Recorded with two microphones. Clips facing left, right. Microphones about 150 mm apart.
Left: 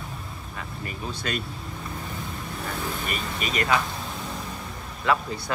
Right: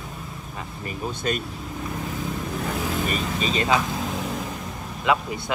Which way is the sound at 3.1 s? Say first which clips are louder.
Right 5 dB; 30° right (ahead or behind).